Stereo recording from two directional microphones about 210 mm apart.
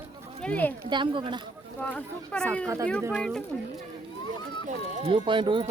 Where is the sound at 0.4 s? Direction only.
10° left (ahead or behind).